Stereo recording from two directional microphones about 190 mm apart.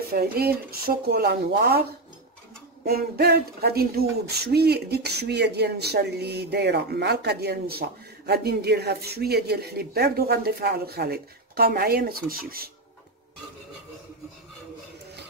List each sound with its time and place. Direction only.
0.4 s speech: 55° right (ahead or behind)
2.8 s speech: 55° right (ahead or behind)